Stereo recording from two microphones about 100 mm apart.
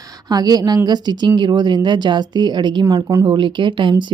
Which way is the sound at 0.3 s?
40° right (ahead or behind).